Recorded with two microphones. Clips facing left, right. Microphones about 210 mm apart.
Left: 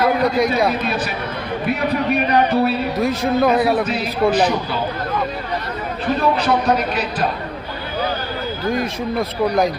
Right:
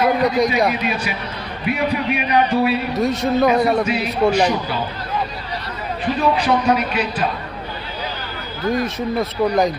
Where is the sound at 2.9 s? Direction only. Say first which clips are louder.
Even; centre (ahead or behind).